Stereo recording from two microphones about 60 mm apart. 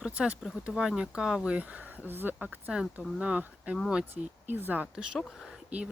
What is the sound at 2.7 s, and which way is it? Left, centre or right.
Speech, centre.